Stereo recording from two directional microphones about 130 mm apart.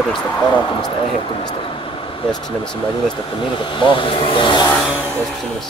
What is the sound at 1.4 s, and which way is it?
Speech, 45° left (ahead or behind).